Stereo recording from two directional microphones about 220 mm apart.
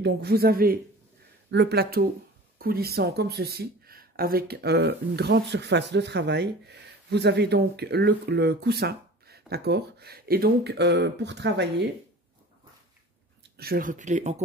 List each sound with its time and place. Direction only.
0.0 s speech: 45° right (ahead or behind)
13.4 s speech: 45° right (ahead or behind)